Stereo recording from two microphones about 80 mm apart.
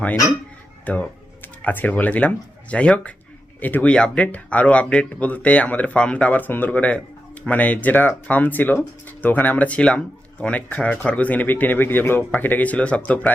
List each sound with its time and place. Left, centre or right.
0.9 s speech: left